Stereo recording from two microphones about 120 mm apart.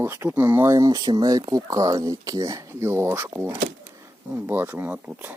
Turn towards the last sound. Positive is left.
turn(degrees=-15)  # may be behind; listen again after turning